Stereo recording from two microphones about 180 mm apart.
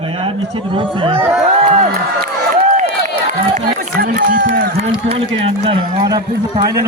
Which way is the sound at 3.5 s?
50° right (ahead or behind).